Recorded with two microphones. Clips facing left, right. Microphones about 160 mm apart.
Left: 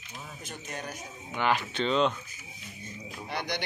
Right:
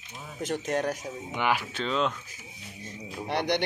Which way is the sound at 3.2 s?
65° right (ahead or behind).